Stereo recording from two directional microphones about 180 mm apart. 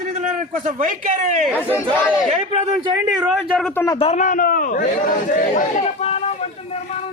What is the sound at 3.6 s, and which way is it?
Speech, 10° left (ahead or behind).